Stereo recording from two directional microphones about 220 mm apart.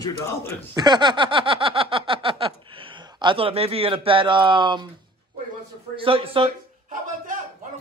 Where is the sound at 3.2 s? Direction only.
25° right (ahead or behind).